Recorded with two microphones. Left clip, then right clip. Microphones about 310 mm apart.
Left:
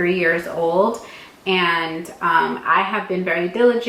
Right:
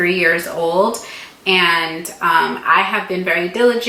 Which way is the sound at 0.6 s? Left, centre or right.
Left.